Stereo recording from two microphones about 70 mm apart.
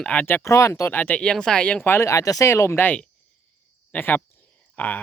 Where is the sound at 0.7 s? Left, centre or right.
Left.